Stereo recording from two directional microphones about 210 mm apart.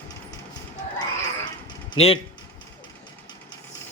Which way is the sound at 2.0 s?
25° left (ahead or behind).